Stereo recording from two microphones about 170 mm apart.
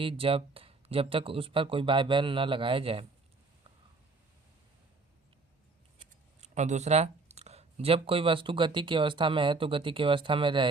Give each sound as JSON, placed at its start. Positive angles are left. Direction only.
{"t": 0.0, "sound": "speech", "side_deg": -30}
{"t": 6.4, "sound": "speech", "side_deg": -45}